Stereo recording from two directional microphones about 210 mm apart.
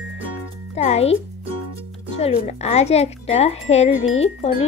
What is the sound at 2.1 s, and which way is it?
Speech, 30° left (ahead or behind).